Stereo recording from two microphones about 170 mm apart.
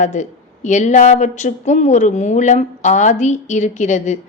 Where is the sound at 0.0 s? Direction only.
45° left (ahead or behind).